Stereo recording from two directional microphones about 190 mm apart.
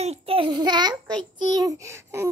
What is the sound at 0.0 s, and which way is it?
A child's voice, 30° right (ahead or behind).